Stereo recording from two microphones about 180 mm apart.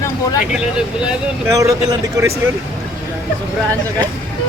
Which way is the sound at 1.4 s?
15° right (ahead or behind).